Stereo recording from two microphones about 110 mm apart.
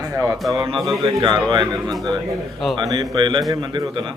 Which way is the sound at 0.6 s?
50° right (ahead or behind).